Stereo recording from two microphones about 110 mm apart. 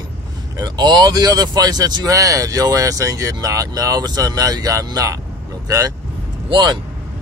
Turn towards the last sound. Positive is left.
turn(degrees=-40)  # may be behind; listen again after turning